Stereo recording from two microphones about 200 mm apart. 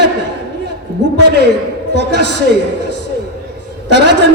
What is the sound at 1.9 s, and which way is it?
Speech, 60° right (ahead or behind).